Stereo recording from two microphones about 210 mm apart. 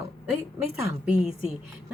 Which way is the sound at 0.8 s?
15° right (ahead or behind).